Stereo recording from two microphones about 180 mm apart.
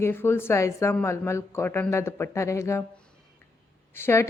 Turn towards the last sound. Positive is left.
turn(degrees=15)  # may be behind; listen again after turning